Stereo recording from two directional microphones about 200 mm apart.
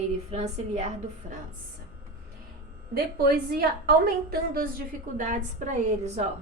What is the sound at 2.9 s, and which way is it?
A woman's voice, 50° right (ahead or behind).